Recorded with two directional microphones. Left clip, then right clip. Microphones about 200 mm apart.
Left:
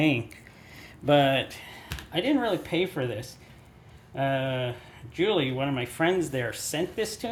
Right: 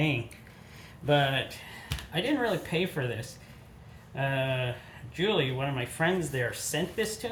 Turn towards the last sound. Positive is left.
turn(degrees=40)  # may be behind; listen again after turning